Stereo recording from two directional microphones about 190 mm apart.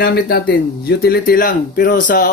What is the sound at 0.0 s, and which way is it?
Speech, 55° left (ahead or behind).